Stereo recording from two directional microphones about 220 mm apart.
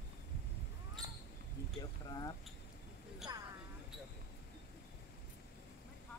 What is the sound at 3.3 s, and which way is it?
Music, 20° right (ahead or behind).